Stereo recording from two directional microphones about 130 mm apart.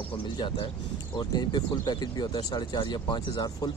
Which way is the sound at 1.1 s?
35° left (ahead or behind).